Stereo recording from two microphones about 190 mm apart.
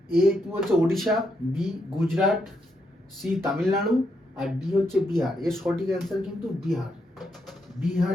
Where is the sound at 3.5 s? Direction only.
Centre (ahead or behind).